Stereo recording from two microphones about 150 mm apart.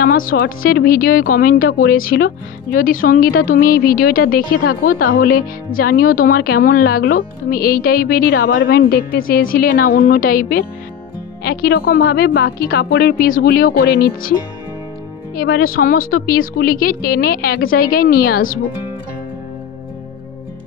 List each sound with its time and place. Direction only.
0.0 s speech: 70° left (ahead or behind)
11.4 s a woman's voice: 90° left
15.3 s speech: 80° left